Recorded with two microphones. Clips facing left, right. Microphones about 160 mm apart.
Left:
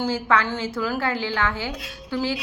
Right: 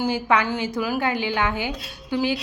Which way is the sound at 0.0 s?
15° right (ahead or behind).